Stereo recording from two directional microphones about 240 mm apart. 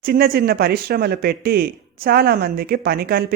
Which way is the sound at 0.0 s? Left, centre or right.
Right.